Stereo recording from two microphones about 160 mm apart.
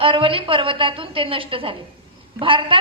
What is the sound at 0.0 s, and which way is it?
A woman's voice, 35° right (ahead or behind).